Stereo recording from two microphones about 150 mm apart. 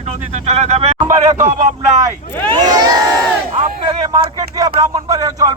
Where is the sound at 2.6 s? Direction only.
25° right (ahead or behind).